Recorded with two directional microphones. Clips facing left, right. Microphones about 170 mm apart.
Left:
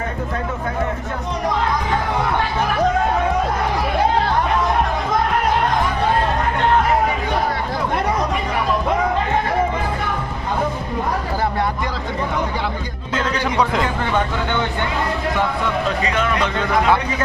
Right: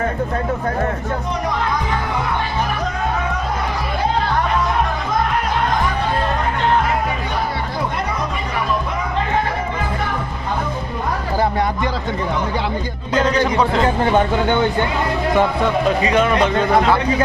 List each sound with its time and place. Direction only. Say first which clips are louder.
16.0 s a man's voice: right 5 dB; 15° right (ahead or behind)
16.3 s a man's voice: right 5 dB; 30° right (ahead or behind)